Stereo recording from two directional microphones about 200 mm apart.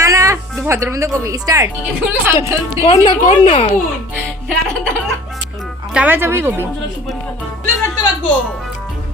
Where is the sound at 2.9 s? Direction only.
35° left (ahead or behind).